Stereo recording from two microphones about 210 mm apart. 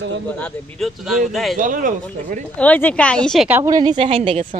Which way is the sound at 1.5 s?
40° right (ahead or behind).